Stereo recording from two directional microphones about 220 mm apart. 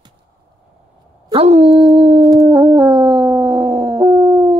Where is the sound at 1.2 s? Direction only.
25° right (ahead or behind).